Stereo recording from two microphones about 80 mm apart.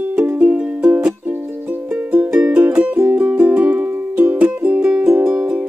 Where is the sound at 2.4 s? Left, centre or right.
Centre.